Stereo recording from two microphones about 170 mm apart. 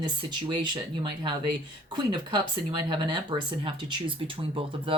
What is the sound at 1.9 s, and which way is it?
Speech, 25° right (ahead or behind).